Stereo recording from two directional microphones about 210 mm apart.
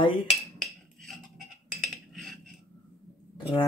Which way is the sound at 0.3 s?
Centre (ahead or behind).